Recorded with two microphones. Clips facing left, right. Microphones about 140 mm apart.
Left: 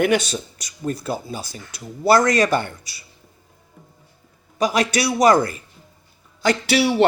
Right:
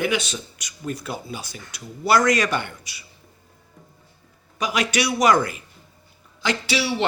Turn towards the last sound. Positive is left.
turn(degrees=55)  # may be behind; listen again after turning